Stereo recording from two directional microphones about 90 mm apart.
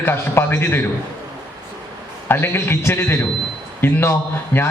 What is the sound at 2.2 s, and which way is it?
A man's voice, 25° left (ahead or behind).